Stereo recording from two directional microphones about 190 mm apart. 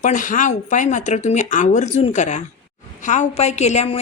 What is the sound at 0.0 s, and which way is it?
A woman's voice, 45° left (ahead or behind).